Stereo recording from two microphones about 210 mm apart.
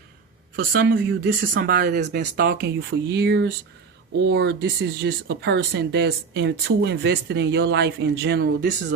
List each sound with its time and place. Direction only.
0.5 s speech: 45° right (ahead or behind)
1.5 s speech: 45° right (ahead or behind)